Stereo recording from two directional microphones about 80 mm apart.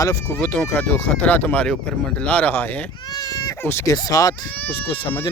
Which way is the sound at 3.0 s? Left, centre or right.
Left.